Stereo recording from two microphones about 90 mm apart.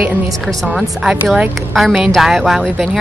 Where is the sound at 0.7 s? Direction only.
Centre (ahead or behind).